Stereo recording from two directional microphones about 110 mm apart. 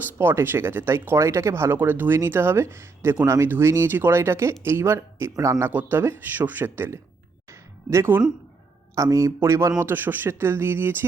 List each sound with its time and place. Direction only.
0.1 s speech: 20° right (ahead or behind)
7.5 s music: 25° right (ahead or behind)
9.0 s speech: 30° right (ahead or behind)